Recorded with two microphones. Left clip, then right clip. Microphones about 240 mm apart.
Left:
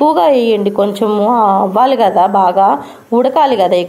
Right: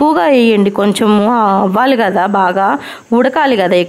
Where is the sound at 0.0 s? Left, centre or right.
Right.